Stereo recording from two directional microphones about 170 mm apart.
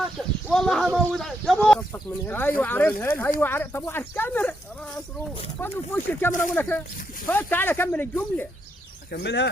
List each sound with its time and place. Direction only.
0.5 s speech: centre (ahead or behind)
5.5 s speech: 10° left (ahead or behind)
9.1 s speech: 85° left